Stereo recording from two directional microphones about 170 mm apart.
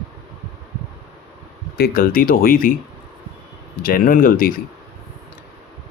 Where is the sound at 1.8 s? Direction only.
60° left (ahead or behind).